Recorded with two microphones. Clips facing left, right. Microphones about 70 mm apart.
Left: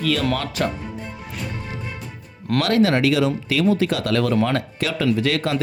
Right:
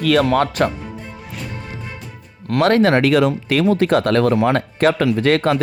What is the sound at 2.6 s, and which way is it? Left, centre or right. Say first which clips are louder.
Speech: right 4 dB; right.